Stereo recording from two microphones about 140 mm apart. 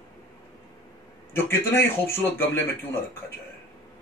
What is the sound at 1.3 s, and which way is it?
Speech, 15° left (ahead or behind).